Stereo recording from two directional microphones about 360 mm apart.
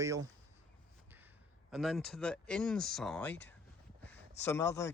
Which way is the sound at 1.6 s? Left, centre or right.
Centre.